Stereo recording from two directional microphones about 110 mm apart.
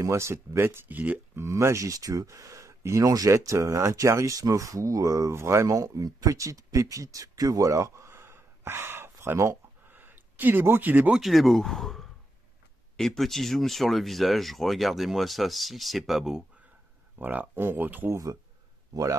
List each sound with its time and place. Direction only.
0.0 s speech: 25° right (ahead or behind)
11.1 s speech: centre (ahead or behind)
17.2 s speech: 15° right (ahead or behind)
18.1 s speech: 30° right (ahead or behind)